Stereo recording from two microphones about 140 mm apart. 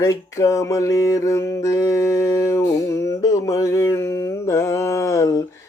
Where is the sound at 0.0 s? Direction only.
25° left (ahead or behind).